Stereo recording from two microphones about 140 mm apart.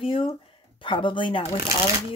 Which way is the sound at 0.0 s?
40° left (ahead or behind).